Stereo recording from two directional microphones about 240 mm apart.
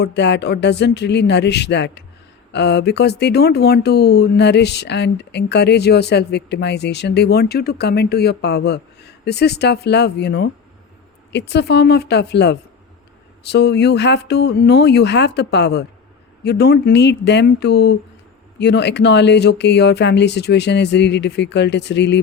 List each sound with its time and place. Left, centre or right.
0.0 s speech: left